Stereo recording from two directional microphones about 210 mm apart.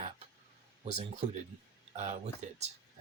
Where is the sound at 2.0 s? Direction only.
35° right (ahead or behind).